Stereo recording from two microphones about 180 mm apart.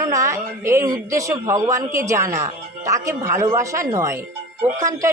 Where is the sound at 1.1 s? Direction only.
15° right (ahead or behind).